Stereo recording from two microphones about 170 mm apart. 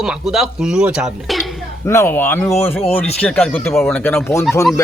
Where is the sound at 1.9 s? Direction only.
15° left (ahead or behind).